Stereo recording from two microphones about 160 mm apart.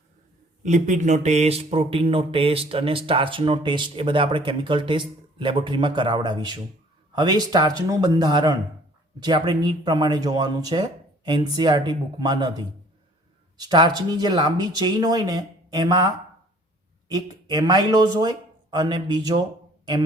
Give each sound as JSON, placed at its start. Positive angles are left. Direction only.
{"t": 0.6, "sound": "speech", "side_deg": -50}